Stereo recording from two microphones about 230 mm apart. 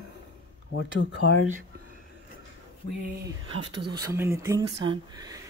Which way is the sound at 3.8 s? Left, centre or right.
Centre.